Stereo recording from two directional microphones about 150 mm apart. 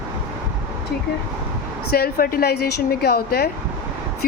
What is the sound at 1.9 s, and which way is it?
A woman's voice, 90° left.